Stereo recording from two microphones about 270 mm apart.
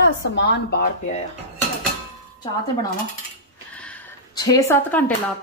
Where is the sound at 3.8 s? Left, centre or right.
Centre.